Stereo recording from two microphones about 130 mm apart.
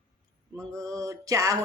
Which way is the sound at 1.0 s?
25° right (ahead or behind).